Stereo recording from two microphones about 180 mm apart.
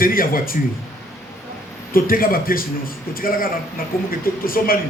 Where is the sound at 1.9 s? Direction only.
55° left (ahead or behind).